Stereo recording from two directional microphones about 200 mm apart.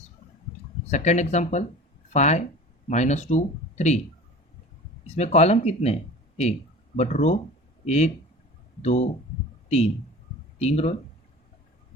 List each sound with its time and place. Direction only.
0.9 s speech: 35° left (ahead or behind)
5.1 s speech: 35° left (ahead or behind)